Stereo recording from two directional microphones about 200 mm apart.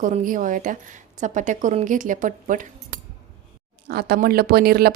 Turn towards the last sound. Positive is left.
turn(degrees=-50)  # may be behind; listen again after turning